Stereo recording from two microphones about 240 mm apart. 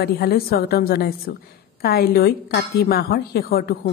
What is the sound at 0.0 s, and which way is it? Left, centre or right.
Speech, left.